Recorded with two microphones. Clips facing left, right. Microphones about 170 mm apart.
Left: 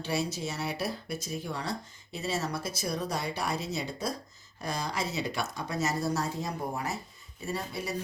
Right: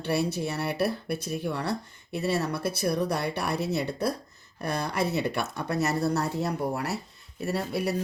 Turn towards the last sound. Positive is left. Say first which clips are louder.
# right 7 dB
turn(degrees=-65)  # may be behind; listen again after turning